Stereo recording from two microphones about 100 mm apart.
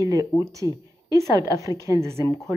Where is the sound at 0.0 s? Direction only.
35° right (ahead or behind).